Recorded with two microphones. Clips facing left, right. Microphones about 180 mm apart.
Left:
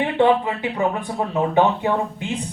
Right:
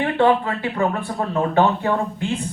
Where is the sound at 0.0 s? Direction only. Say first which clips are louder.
Even; 15° left (ahead or behind).